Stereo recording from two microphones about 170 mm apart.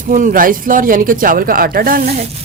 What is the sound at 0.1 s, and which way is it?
A woman's voice, 50° right (ahead or behind).